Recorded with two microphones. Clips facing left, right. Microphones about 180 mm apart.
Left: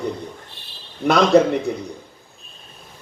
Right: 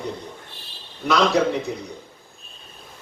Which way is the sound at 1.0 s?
55° left (ahead or behind).